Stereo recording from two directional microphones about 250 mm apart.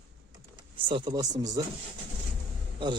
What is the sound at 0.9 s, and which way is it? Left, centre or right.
Speech, centre.